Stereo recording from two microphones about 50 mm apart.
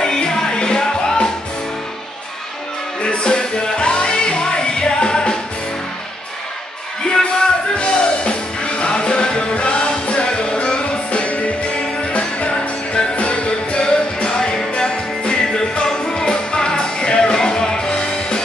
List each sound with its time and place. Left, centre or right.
0.0 s music: centre
3.0 s music: centre
7.1 s music: centre